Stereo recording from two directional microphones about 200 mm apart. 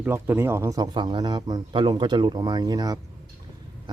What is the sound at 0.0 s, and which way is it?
A man's voice, 10° right (ahead or behind).